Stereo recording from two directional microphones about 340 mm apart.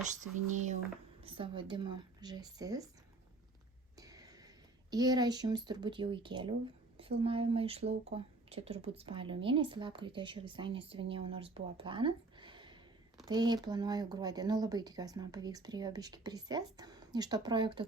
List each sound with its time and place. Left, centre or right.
0.1 s speech: right
3.9 s speech: centre